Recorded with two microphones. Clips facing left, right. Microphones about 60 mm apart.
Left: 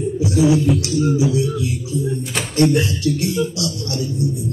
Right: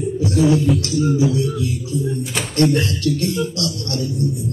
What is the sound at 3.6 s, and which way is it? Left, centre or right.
Speech, left.